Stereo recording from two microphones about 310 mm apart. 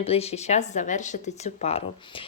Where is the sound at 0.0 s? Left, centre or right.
Centre.